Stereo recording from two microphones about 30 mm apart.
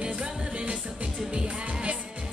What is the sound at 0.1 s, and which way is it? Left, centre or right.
Music, right.